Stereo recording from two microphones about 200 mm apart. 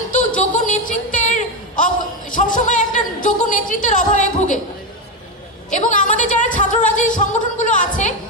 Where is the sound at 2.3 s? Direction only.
40° left (ahead or behind).